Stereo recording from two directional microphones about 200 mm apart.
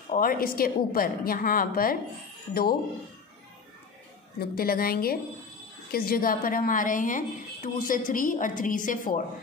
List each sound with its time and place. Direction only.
0.1 s a woman's voice: 45° left (ahead or behind)
4.4 s a woman's voice: 50° left (ahead or behind)